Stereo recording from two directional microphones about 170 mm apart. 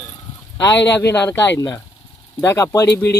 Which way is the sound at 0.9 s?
15° left (ahead or behind).